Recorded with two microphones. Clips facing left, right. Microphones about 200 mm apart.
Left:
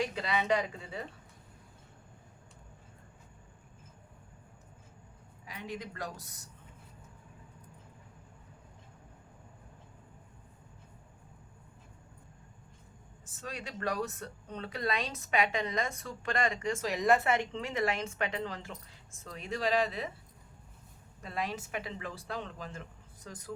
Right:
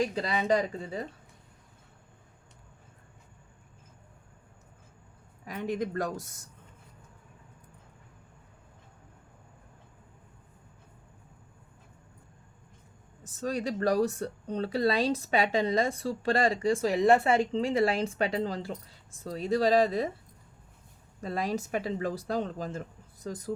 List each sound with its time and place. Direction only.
0.0 s speech: 35° right (ahead or behind)
5.5 s speech: 50° right (ahead or behind)
13.4 s speech: 40° right (ahead or behind)
21.2 s speech: 40° right (ahead or behind)